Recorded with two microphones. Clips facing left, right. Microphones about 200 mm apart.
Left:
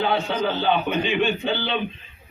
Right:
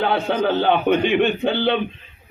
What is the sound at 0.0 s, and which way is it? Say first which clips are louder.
A man's voice: right 3 dB; 55° right (ahead or behind).